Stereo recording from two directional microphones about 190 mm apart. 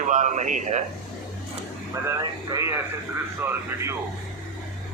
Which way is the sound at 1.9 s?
15° right (ahead or behind).